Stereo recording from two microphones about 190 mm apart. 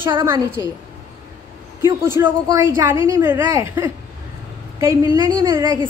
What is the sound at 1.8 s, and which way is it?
A woman's voice, 15° right (ahead or behind).